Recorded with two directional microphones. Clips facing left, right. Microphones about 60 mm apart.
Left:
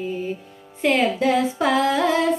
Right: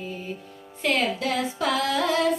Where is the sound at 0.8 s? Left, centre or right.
Left.